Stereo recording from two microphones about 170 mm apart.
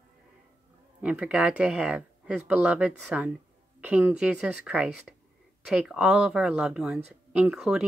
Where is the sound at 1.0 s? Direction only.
5° right (ahead or behind).